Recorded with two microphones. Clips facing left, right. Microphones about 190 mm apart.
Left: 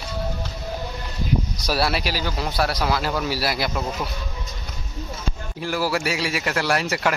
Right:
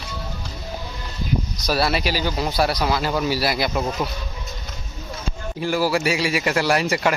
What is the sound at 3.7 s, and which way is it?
Speech, 10° right (ahead or behind).